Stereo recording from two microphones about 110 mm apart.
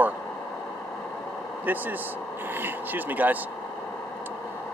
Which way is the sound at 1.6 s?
15° right (ahead or behind).